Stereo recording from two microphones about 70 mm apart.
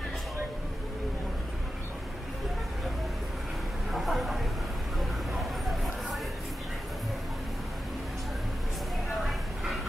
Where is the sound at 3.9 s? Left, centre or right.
Centre.